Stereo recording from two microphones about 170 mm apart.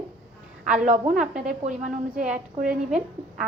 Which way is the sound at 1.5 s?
45° right (ahead or behind).